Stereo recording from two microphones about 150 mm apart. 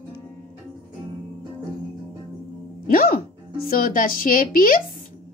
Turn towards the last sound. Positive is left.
turn(degrees=70)  # may be behind; listen again after turning